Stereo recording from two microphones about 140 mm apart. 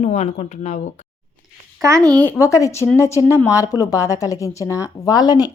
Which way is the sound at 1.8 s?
20° right (ahead or behind).